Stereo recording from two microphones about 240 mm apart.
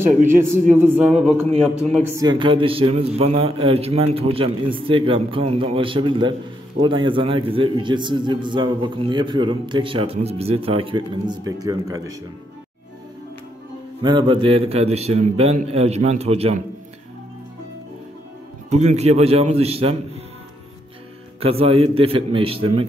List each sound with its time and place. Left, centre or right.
0.3 s a man's voice: centre
2.1 s a man's voice: centre
14.0 s a man's voice: centre
18.7 s a man's voice: right
21.4 s a man's voice: right